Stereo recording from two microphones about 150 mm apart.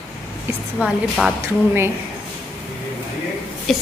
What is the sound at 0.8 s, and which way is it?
Speech, 10° right (ahead or behind).